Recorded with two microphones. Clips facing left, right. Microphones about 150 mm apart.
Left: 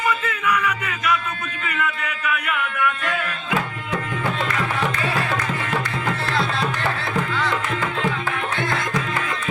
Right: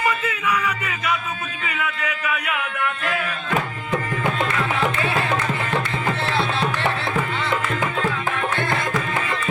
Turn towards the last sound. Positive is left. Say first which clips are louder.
# even
turn(degrees=-25)  # may be behind; listen again after turning